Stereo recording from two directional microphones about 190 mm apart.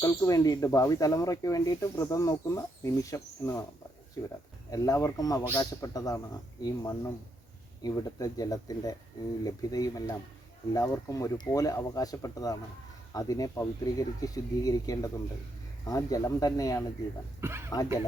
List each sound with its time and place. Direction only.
0.0 s speech: 20° left (ahead or behind)
17.4 s speech: 15° right (ahead or behind)